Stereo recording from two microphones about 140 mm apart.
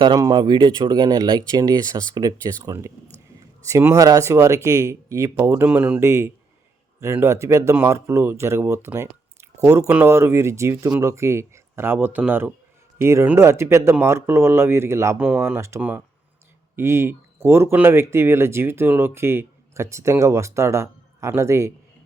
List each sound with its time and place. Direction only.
0.2 s speech: 30° right (ahead or behind)